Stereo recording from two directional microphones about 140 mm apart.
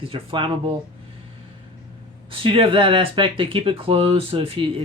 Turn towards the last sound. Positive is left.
turn(degrees=-40)  # may be behind; listen again after turning